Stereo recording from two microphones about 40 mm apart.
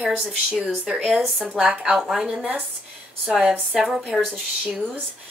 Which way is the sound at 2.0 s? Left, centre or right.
Centre.